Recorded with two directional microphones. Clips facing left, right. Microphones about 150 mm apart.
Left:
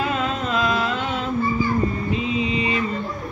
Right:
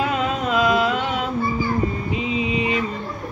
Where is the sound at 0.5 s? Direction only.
15° right (ahead or behind).